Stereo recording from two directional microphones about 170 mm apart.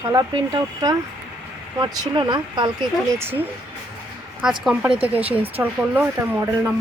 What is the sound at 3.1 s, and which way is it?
Speech, 10° right (ahead or behind).